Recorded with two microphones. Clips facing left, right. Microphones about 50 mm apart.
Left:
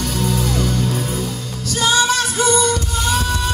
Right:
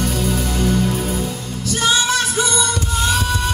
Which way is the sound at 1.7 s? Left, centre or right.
Right.